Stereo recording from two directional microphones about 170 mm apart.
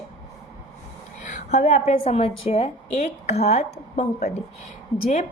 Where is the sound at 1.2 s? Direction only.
45° left (ahead or behind).